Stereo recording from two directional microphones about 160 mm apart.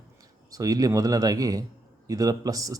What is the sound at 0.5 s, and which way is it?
Speech, 20° right (ahead or behind).